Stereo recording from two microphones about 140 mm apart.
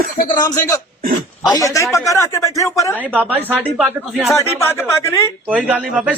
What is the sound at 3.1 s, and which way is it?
A man's voice, 10° right (ahead or behind).